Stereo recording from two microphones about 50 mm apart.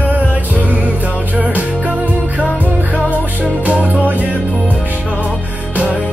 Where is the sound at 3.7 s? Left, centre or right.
Right.